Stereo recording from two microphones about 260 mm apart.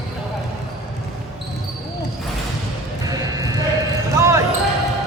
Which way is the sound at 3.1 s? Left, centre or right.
Centre.